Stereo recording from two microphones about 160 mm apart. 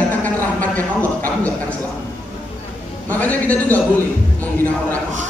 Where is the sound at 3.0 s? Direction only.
10° left (ahead or behind).